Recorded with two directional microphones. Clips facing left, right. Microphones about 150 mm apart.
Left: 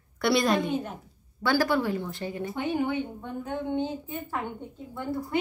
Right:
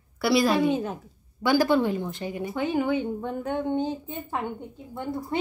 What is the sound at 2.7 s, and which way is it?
Speech, 90° right.